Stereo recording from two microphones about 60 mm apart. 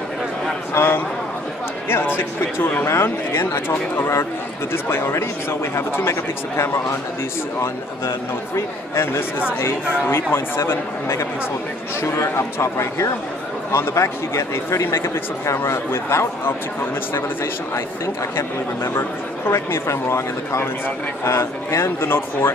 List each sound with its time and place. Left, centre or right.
0.7 s a man's voice: left
8.5 s speech: left
19.5 s speech: left